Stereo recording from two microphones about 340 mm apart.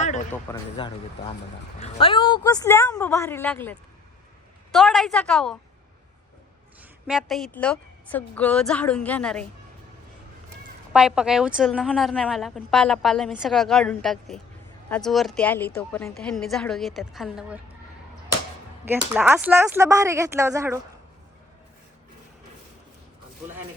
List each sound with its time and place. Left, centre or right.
0.5 s a woman's voice: centre
1.8 s a woman's voice: centre
7.1 s a woman's voice: centre
10.9 s a woman's voice: centre
18.9 s speech: centre